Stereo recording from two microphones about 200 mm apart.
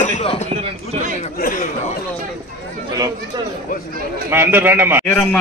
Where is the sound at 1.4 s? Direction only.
45° left (ahead or behind).